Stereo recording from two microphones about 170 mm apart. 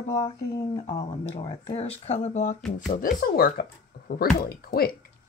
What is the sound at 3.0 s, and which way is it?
Speech, 60° left (ahead or behind).